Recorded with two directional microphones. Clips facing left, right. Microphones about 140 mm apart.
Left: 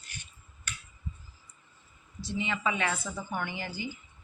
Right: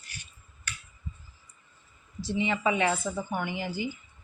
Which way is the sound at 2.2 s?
25° right (ahead or behind).